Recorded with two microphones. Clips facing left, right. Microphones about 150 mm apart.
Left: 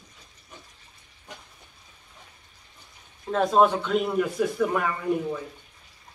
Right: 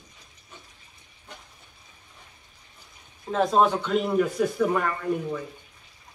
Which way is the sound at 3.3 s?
Centre (ahead or behind).